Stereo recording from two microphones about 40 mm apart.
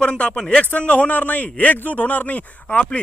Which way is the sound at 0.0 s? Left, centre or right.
Left.